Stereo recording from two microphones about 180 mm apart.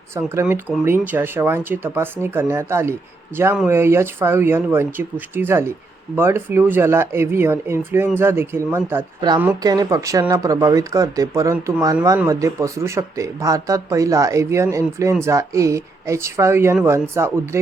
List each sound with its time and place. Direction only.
0.1 s speech: 15° right (ahead or behind)